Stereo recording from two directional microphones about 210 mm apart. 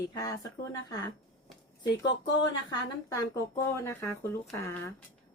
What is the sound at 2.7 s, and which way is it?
Speech, 15° left (ahead or behind).